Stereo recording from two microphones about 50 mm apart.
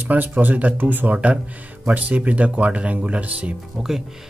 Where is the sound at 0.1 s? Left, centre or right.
Right.